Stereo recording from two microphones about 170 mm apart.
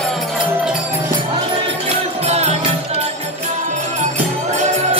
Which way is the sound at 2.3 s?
40° right (ahead or behind).